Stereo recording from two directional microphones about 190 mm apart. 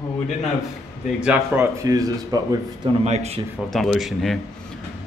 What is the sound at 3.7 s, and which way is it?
Speech, centre (ahead or behind).